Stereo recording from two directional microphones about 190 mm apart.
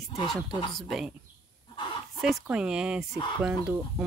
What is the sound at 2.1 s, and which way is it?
Speech, centre (ahead or behind).